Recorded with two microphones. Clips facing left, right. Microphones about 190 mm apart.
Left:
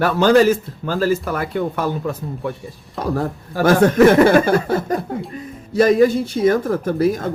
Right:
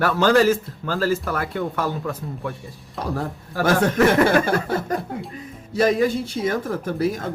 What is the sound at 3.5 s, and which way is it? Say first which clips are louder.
Speech: left 5 dB; 20° left (ahead or behind).